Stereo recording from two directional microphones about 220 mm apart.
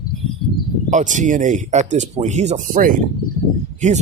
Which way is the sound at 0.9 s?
35° right (ahead or behind).